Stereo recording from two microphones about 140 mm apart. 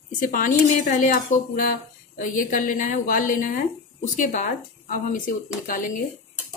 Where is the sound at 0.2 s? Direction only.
75° left (ahead or behind).